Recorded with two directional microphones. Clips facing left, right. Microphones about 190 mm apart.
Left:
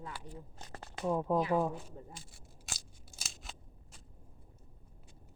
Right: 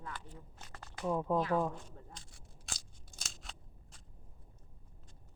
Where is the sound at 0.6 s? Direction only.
35° left (ahead or behind).